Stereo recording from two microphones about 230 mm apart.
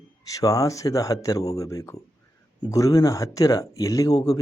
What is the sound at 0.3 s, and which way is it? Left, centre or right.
A man's voice, centre.